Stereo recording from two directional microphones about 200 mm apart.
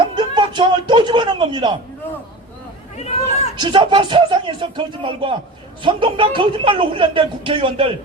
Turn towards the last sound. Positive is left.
turn(degrees=-25)  # may be behind; listen again after turning